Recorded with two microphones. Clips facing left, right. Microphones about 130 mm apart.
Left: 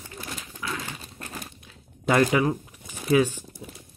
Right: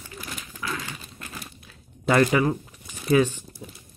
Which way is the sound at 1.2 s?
40° left (ahead or behind).